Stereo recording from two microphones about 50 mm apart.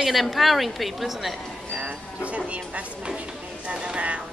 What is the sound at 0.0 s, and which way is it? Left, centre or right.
A woman's voice, centre.